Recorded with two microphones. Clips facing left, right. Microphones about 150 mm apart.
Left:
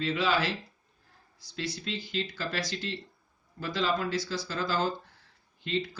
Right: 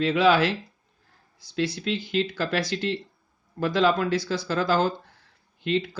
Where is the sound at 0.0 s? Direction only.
65° right (ahead or behind).